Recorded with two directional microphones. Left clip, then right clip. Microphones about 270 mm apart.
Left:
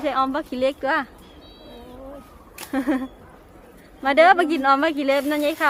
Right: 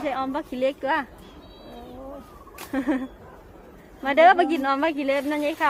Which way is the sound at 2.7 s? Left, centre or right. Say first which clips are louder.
Left 2 dB; centre.